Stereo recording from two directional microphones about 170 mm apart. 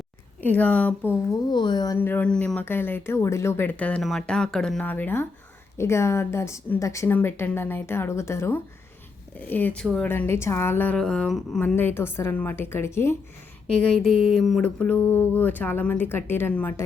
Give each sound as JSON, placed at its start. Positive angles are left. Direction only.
{"t": 0.4, "sound": "a woman's voice", "side_deg": 10}
{"t": 1.5, "sound": "speech", "side_deg": 25}
{"t": 2.0, "sound": "a woman's voice", "side_deg": 10}